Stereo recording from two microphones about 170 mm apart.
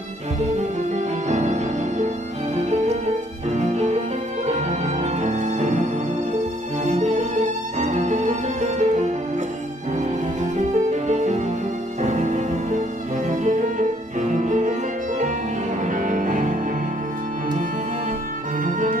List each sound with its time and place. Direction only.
0.9 s violin: 40° right (ahead or behind)
2.5 s music: 40° right (ahead or behind)
3.5 s violin: 40° right (ahead or behind)
4.5 s music: 40° right (ahead or behind)
11.1 s music: 45° right (ahead or behind)
13.4 s violin: 50° right (ahead or behind)
15.8 s cello: 50° right (ahead or behind)
18.6 s music: 50° right (ahead or behind)